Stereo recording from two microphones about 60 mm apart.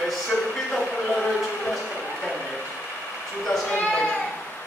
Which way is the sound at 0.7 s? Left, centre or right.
Centre.